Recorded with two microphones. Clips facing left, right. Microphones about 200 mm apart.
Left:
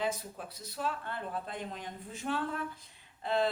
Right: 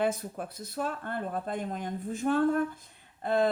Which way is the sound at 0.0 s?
55° right (ahead or behind).